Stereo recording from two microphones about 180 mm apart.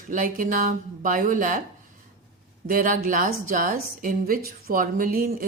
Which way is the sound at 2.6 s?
50° right (ahead or behind).